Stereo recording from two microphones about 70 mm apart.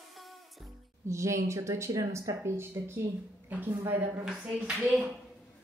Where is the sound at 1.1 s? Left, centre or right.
Right.